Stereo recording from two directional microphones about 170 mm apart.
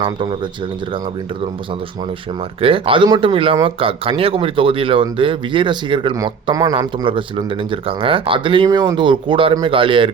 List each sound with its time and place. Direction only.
2.6 s speech: 30° right (ahead or behind)